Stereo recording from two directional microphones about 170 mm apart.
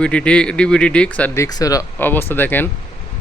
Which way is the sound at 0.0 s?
5° left (ahead or behind).